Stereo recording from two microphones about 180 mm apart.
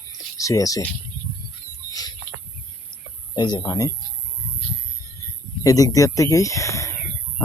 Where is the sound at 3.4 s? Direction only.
25° left (ahead or behind).